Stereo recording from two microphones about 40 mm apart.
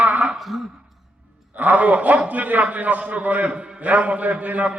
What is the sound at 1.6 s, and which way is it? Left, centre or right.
A man's voice, right.